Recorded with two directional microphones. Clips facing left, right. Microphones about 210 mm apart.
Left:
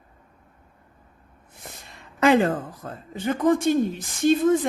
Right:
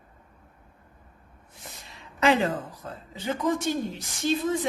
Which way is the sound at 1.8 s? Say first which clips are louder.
Left 3 dB; 50° left (ahead or behind).